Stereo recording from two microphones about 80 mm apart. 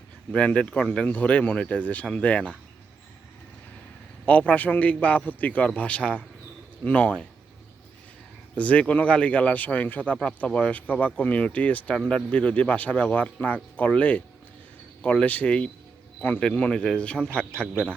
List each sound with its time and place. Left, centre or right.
0.3 s a man's voice: centre
4.3 s a man's voice: centre
8.5 s speech: centre